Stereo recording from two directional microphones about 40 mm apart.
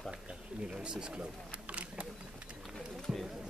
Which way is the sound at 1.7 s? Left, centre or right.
Right.